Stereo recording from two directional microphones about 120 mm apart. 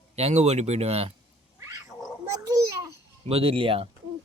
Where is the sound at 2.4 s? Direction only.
30° right (ahead or behind).